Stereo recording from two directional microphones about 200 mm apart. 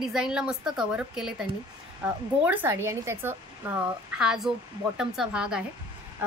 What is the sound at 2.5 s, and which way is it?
A woman's voice, 10° right (ahead or behind).